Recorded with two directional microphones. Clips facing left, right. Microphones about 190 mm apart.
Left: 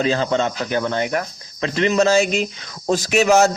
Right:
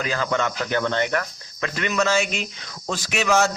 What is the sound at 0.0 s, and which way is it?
Speech, 25° left (ahead or behind).